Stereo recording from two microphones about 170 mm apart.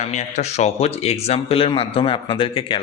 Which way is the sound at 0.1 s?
45° left (ahead or behind).